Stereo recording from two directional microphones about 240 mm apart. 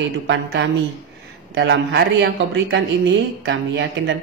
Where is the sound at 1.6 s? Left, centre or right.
Right.